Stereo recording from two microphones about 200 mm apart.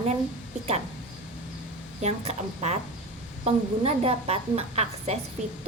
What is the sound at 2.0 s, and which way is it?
A woman's voice, 35° right (ahead or behind).